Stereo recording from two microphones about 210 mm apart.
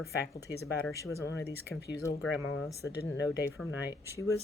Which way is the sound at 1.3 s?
55° left (ahead or behind).